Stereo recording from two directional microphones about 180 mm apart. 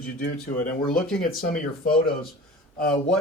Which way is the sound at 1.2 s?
55° left (ahead or behind).